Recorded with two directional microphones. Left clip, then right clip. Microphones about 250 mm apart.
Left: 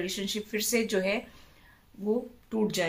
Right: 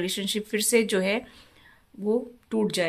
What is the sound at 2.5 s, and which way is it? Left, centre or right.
Speech, right.